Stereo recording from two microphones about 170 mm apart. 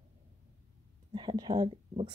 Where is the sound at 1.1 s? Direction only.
25° right (ahead or behind).